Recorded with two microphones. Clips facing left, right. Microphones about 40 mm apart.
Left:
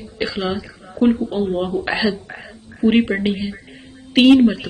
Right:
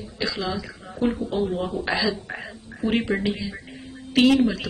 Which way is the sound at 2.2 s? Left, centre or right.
Centre.